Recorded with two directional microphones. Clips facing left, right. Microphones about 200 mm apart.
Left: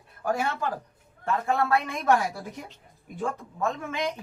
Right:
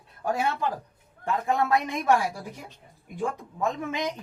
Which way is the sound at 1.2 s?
15° right (ahead or behind).